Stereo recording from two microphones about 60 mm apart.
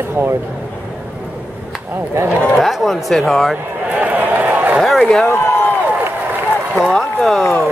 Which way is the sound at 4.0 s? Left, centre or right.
Right.